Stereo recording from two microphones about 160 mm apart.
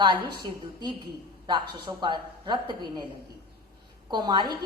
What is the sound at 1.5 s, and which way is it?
A woman's voice, 30° right (ahead or behind).